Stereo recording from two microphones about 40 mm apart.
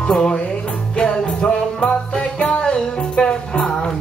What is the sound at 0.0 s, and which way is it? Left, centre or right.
Music, centre.